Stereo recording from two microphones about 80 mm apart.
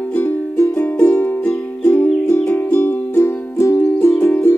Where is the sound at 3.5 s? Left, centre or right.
Left.